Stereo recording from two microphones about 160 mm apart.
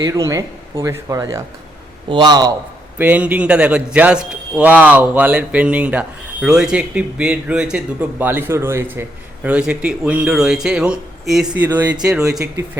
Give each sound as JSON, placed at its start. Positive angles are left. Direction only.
{"t": 0.0, "sound": "speech", "side_deg": -20}
{"t": 3.0, "sound": "speech", "side_deg": -10}